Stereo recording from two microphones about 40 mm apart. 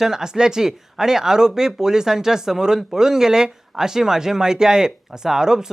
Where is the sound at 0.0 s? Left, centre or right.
Centre.